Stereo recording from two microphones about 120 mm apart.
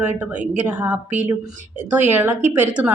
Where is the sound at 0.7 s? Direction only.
15° right (ahead or behind).